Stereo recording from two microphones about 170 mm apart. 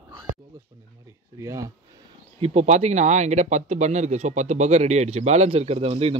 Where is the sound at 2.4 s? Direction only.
40° right (ahead or behind).